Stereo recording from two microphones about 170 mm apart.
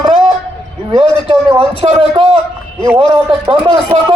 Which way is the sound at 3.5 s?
30° right (ahead or behind).